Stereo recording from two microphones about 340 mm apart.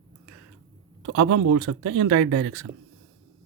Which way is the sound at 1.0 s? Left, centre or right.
Right.